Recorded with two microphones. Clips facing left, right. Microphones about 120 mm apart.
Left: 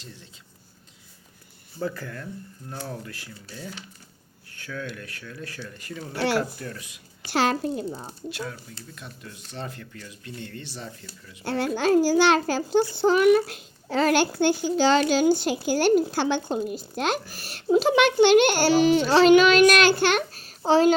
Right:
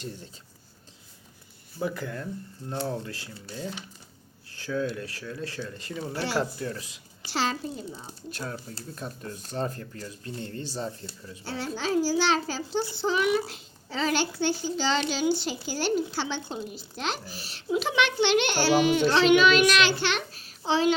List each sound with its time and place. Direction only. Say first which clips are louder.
1.8 s speech: even; 15° right (ahead or behind)
6.2 s a child's voice: left 6 dB; 60° left (ahead or behind)
6.6 s speech: right 3 dB; 25° right (ahead or behind)
7.3 s a child's voice: left 6 dB; 55° left (ahead or behind)
8.3 s speech: even; 40° right (ahead or behind)
11.4 s a child's voice: left 8 dB; 60° left (ahead or behind); by 20.9 s 40° left (ahead or behind)